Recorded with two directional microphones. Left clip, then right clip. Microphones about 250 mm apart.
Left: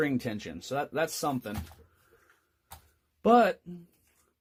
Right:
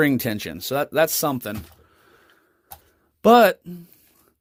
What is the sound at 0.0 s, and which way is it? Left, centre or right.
Speech, right.